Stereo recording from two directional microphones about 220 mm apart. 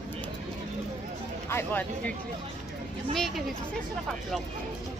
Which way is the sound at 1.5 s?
10° left (ahead or behind).